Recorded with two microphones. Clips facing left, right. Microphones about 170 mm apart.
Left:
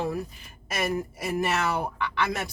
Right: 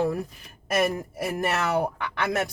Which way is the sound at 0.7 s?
55° right (ahead or behind).